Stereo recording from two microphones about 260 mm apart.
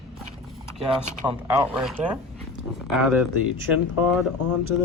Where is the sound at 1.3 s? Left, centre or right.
Centre.